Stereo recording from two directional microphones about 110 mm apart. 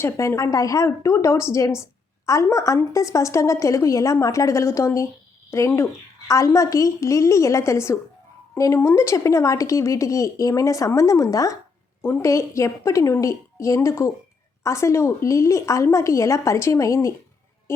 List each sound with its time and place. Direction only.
0.0 s a woman's voice: 25° left (ahead or behind)